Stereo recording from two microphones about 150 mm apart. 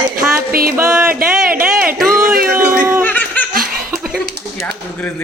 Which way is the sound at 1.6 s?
5° right (ahead or behind).